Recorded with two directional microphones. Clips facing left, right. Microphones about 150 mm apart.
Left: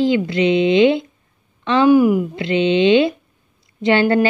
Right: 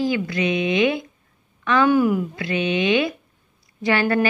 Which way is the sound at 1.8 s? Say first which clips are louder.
Left 7 dB; 10° left (ahead or behind).